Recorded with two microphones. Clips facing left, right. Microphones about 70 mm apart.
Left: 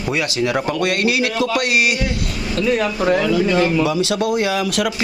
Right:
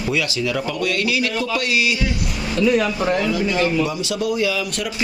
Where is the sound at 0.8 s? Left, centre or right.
Left.